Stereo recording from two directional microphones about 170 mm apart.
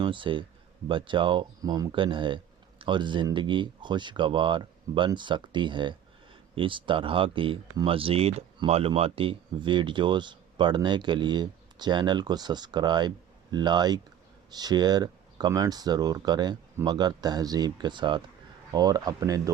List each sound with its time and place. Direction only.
0.0 s speech: 30° right (ahead or behind)